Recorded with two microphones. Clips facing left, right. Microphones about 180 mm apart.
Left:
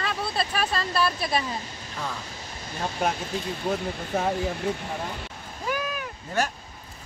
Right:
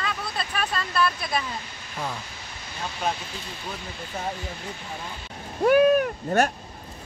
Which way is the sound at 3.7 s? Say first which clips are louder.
Left 8 dB; 60° left (ahead or behind).